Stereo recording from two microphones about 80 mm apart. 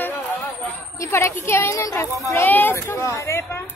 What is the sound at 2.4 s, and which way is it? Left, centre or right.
Speech, left.